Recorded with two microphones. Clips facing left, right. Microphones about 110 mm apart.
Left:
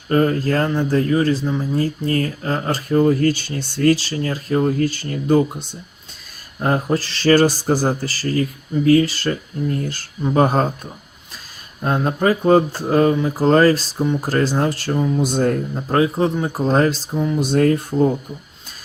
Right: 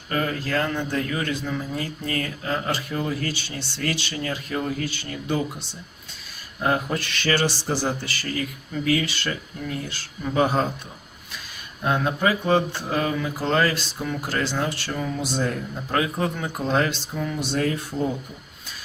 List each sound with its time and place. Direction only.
0.1 s speech: 40° left (ahead or behind)
11.8 s speech: 40° left (ahead or behind)
17.4 s speech: 45° left (ahead or behind)